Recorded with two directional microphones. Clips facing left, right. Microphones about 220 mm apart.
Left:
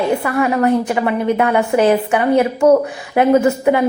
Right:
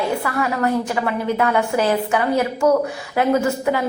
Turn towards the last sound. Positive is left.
turn(degrees=20)  # may be behind; listen again after turning